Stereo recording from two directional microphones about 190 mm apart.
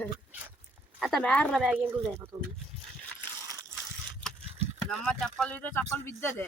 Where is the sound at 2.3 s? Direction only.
15° right (ahead or behind).